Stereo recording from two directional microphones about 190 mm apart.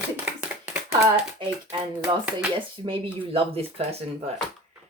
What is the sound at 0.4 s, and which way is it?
Hands, 5° right (ahead or behind).